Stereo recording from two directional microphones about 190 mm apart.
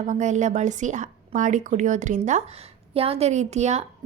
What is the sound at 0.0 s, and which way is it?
A woman's voice, 40° right (ahead or behind).